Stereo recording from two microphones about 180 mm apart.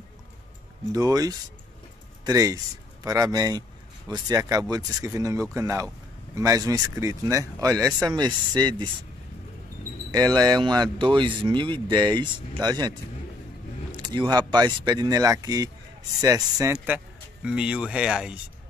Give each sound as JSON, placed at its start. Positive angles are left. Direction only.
{"t": 0.9, "sound": "speech", "side_deg": -20}
{"t": 10.1, "sound": "speech", "side_deg": -20}
{"t": 13.9, "sound": "a sound", "side_deg": -25}
{"t": 14.5, "sound": "speech", "side_deg": -25}
{"t": 16.7, "sound": "speech", "side_deg": -5}